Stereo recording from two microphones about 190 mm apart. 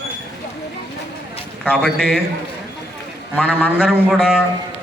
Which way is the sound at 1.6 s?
5° left (ahead or behind).